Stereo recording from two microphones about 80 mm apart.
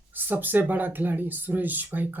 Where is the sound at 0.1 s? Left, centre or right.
Right.